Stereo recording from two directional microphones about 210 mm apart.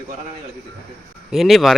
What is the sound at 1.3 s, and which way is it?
Speech, centre (ahead or behind).